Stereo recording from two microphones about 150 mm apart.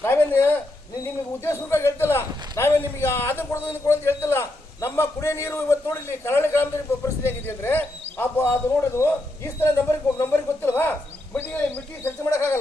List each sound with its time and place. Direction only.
0.0 s a man's voice: 15° left (ahead or behind)
7.2 s a sound: 15° left (ahead or behind)
12.0 s a man's voice: 15° left (ahead or behind)